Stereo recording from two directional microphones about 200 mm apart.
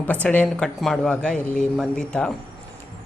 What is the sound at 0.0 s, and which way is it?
Speech, 10° left (ahead or behind).